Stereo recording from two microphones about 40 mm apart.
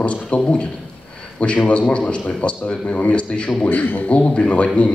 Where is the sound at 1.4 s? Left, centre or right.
Left.